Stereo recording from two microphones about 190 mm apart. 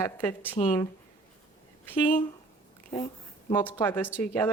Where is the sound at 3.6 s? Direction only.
10° left (ahead or behind).